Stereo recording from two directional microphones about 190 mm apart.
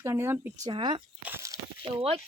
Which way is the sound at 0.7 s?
25° right (ahead or behind).